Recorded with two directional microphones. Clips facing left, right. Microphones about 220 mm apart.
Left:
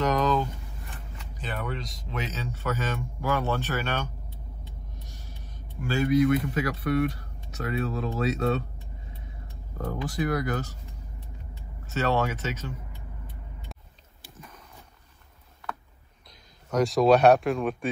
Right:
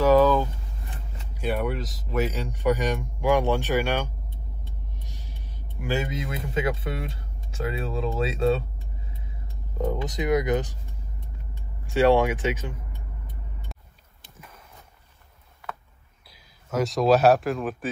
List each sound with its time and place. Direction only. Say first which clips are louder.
0.0 s a sound: right 7 dB; 10° right (ahead or behind)
1.3 s speech: right 7 dB; 10° right (ahead or behind)
5.4 s speech: left 1 dB; 15° right (ahead or behind); by 8.6 s 30° right (ahead or behind)
9.8 s speech: right 2 dB; 20° right (ahead or behind)
11.8 s speech: right 7 dB; 15° right (ahead or behind)
16.7 s speech: left 1 dB; centre (ahead or behind)